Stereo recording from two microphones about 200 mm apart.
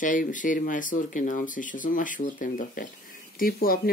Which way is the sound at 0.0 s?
40° left (ahead or behind).